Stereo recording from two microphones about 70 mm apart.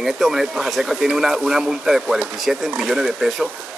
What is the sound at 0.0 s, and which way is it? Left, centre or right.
Speech, centre.